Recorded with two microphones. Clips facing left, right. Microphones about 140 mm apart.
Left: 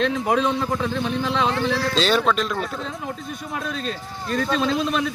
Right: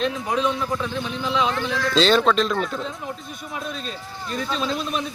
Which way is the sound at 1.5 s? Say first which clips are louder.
Left 2 dB; 30° left (ahead or behind).